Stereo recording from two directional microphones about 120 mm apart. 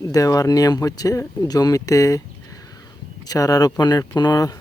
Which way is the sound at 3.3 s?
30° left (ahead or behind).